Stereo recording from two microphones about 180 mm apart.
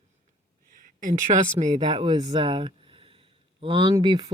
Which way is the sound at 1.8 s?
25° right (ahead or behind).